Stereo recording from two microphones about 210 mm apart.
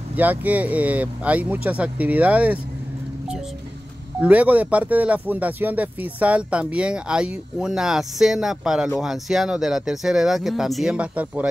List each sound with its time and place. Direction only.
0.1 s speech: 10° right (ahead or behind)
4.2 s speech: 5° right (ahead or behind)